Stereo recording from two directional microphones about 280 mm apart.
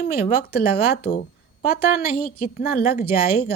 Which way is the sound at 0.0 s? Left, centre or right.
Left.